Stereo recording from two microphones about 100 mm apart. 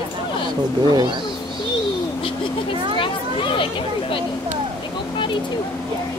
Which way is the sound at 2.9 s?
60° left (ahead or behind).